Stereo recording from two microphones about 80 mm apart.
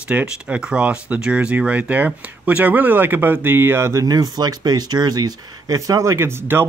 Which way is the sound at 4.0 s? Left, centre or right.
Right.